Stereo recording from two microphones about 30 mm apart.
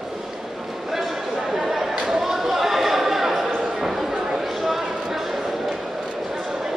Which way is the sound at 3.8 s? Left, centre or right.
Centre.